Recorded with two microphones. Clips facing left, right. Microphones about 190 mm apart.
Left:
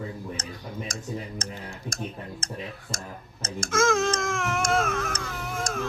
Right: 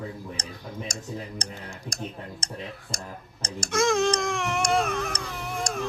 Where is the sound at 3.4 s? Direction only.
Centre (ahead or behind).